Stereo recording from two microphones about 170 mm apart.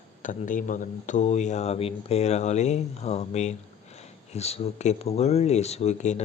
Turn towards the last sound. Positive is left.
turn(degrees=40)  # may be behind; listen again after turning